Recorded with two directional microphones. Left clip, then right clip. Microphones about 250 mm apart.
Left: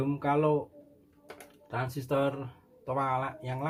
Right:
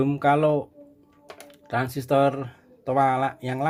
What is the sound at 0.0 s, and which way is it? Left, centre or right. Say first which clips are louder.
Speech: right 8 dB; right.